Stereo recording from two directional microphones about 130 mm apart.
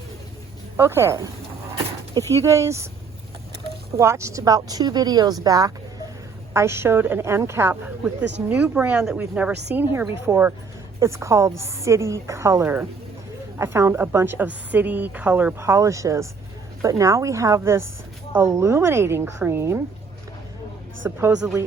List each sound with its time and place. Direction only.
0.8 s a woman's voice: 20° right (ahead or behind)
2.3 s a woman's voice: 25° right (ahead or behind)
3.9 s a woman's voice: 20° right (ahead or behind)
21.0 s a woman's voice: 20° right (ahead or behind)